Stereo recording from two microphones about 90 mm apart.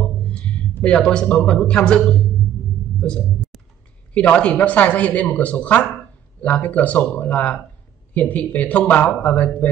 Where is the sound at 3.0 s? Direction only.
10° left (ahead or behind).